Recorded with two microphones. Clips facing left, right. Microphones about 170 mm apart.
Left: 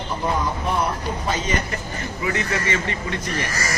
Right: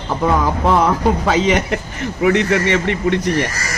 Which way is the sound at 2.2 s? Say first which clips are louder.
Right 10 dB; 70° right (ahead or behind).